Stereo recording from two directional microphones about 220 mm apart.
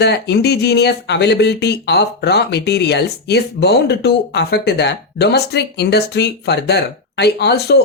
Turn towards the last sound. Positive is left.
turn(degrees=45)  # may be behind; listen again after turning